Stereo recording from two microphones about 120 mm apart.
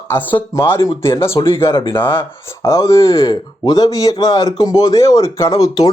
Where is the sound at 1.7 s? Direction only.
45° left (ahead or behind).